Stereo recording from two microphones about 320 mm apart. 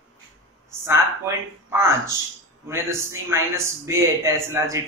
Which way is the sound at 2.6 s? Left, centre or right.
Centre.